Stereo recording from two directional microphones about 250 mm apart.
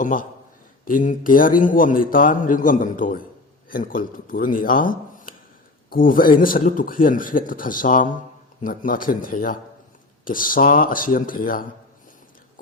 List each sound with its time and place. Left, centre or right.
0.0 s a man's voice: left